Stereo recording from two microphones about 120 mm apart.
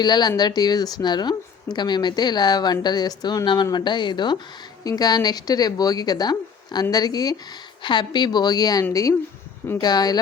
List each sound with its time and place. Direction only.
0.0 s a woman's voice: 35° left (ahead or behind)